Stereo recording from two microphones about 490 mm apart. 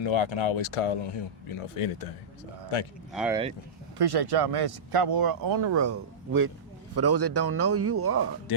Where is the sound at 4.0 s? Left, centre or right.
Right.